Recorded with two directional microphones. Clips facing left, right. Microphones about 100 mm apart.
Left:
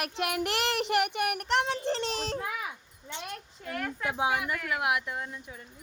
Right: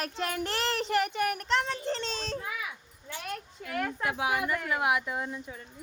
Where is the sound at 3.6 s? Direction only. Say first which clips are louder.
Left 1 dB; centre (ahead or behind).